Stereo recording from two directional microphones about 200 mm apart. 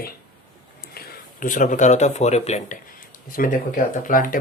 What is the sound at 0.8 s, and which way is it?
Speech, 50° left (ahead or behind).